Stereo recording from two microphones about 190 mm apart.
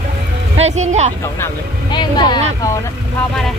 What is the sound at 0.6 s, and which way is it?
Speech, 35° right (ahead or behind).